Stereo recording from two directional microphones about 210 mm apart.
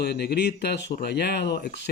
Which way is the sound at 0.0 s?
50° left (ahead or behind).